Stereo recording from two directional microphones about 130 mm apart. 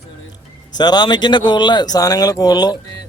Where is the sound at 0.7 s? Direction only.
30° left (ahead or behind).